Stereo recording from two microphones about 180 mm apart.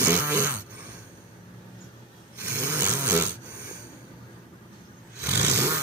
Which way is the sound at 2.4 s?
10° right (ahead or behind).